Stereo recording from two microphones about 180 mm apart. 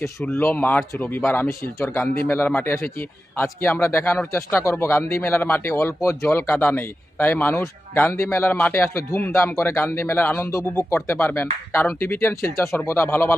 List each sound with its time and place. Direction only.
0.0 s speech: 10° left (ahead or behind)